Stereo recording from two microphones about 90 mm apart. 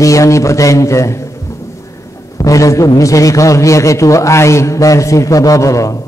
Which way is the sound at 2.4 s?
40° left (ahead or behind).